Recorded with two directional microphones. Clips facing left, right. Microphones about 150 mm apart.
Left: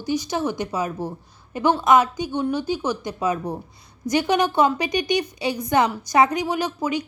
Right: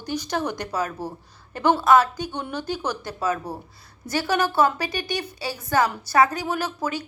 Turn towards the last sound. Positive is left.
turn(degrees=15)  # may be behind; listen again after turning